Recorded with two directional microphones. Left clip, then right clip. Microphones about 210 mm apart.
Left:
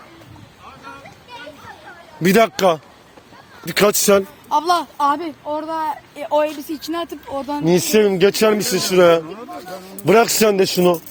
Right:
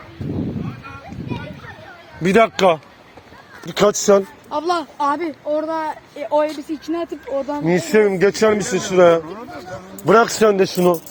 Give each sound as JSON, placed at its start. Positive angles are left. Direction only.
{"t": 2.2, "sound": "a man's voice", "side_deg": 40}
{"t": 6.1, "sound": "a man's voice", "side_deg": 40}